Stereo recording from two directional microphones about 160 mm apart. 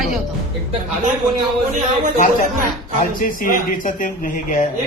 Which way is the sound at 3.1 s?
60° left (ahead or behind).